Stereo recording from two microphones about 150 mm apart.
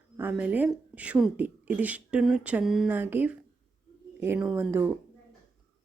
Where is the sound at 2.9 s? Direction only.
15° right (ahead or behind).